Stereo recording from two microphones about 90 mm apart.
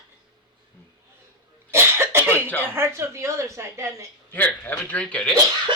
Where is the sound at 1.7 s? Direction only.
30° right (ahead or behind).